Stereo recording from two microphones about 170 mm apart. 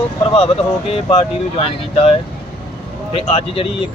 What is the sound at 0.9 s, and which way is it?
Speech, 35° left (ahead or behind).